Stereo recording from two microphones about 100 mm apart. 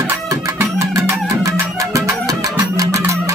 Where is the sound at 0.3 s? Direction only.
30° right (ahead or behind).